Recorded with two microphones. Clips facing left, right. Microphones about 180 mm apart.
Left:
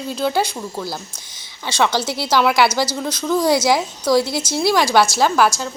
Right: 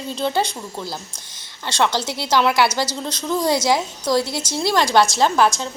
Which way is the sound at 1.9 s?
15° right (ahead or behind).